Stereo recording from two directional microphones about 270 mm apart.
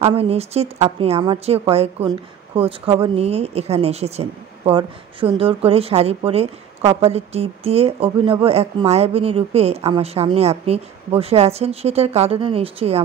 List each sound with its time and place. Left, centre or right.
0.0 s a woman's voice: right